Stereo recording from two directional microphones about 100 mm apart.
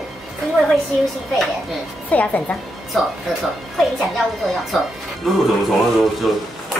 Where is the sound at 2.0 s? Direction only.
15° left (ahead or behind).